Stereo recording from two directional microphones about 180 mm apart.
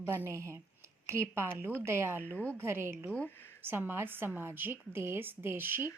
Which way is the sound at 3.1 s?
10° left (ahead or behind).